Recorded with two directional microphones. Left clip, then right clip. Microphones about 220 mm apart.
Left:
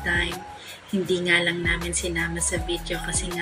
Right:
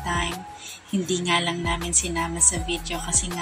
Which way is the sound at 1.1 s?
30° right (ahead or behind).